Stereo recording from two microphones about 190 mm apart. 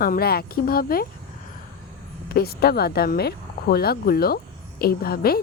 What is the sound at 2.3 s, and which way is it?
Speech, 55° left (ahead or behind).